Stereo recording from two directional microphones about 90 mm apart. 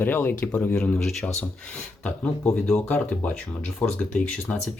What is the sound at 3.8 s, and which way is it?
Speech, 15° left (ahead or behind).